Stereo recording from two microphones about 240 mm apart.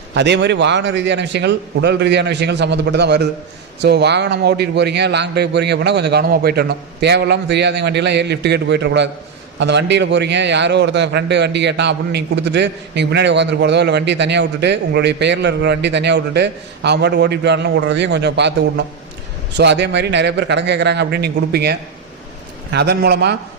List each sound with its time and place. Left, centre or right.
0.1 s a man's voice: right